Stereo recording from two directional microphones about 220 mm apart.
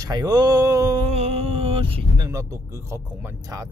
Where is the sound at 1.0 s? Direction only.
30° right (ahead or behind).